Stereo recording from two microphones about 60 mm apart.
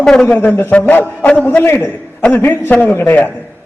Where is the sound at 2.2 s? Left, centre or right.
Left.